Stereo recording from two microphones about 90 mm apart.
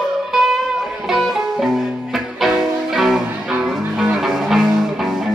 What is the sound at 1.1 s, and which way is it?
Music, 5° right (ahead or behind).